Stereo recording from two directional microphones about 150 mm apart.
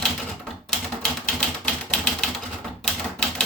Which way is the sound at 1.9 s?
Centre (ahead or behind).